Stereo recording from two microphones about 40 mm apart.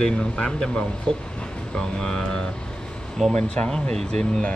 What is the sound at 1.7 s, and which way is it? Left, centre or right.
Speech, centre.